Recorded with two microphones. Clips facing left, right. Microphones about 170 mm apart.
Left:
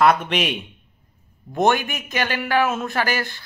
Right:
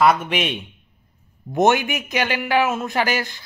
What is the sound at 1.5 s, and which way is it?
A man's voice, 20° right (ahead or behind).